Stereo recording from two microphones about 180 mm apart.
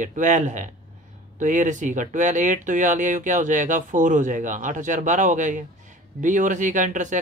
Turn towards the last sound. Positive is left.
turn(degrees=-45)  # may be behind; listen again after turning